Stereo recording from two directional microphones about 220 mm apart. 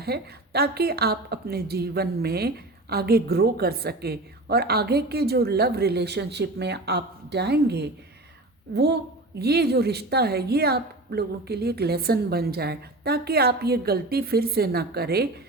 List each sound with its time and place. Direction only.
0.0 s a woman's voice: 45° right (ahead or behind)